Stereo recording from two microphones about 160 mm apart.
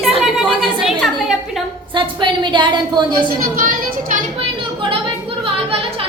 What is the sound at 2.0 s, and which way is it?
A woman's voice, 30° right (ahead or behind).